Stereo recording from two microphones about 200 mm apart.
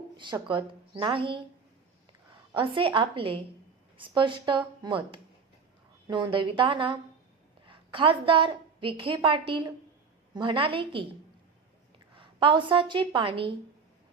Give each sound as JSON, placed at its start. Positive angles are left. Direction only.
{"t": 0.2, "sound": "a woman's voice", "side_deg": -25}
{"t": 2.6, "sound": "a woman's voice", "side_deg": -25}
{"t": 12.1, "sound": "a woman's voice", "side_deg": -25}